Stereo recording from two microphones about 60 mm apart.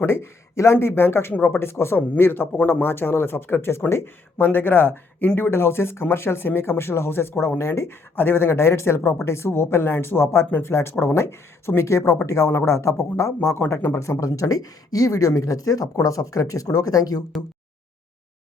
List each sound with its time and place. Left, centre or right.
0.0 s speech: left
2.0 s speech: left